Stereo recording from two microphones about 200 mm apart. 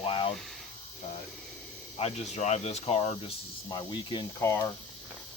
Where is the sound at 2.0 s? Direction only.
30° left (ahead or behind); by 4.7 s 15° left (ahead or behind).